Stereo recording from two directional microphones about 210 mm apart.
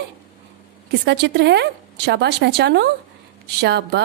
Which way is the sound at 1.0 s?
55° right (ahead or behind).